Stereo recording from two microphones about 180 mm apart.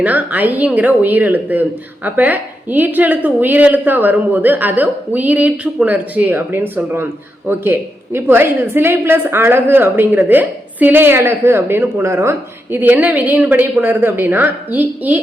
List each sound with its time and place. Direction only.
0.0 s a woman's voice: 10° right (ahead or behind)